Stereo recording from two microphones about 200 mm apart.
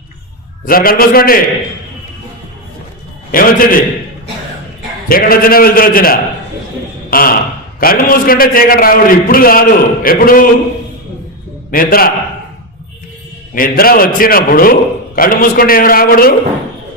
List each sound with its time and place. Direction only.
0.6 s a man's voice: 45° left (ahead or behind)
3.3 s a man's voice: 45° left (ahead or behind)
5.0 s a man's voice: 45° left (ahead or behind)
7.1 s a sound: 45° left (ahead or behind)
7.8 s a man's voice: 45° left (ahead or behind)
11.7 s a man's voice: 45° left (ahead or behind)
13.6 s a man's voice: 45° left (ahead or behind)